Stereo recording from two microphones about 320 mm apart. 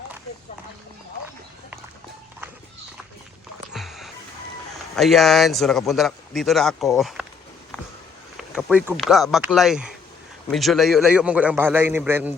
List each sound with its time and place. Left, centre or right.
3.7 s a sound: centre
4.9 s a man's voice: centre
8.4 s a man's voice: centre